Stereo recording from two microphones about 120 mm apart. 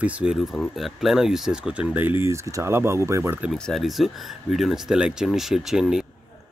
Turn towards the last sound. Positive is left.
turn(degrees=-5)  # may be behind; listen again after turning